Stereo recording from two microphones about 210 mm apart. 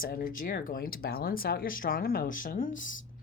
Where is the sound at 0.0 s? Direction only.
45° left (ahead or behind).